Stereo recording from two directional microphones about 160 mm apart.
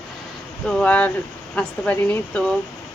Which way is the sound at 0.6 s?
5° left (ahead or behind).